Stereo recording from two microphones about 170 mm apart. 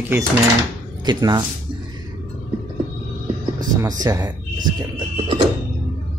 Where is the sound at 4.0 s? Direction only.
20° right (ahead or behind).